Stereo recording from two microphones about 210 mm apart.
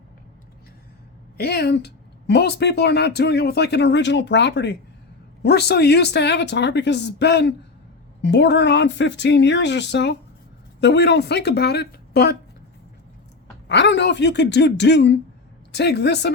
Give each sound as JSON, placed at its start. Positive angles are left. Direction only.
{"t": 1.4, "sound": "speech", "side_deg": 50}
{"t": 13.7, "sound": "speech", "side_deg": 55}